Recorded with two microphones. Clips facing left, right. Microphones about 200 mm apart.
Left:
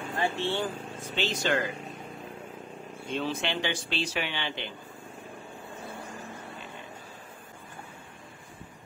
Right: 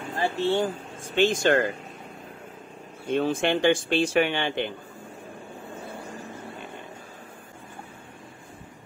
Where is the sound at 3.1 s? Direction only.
50° right (ahead or behind).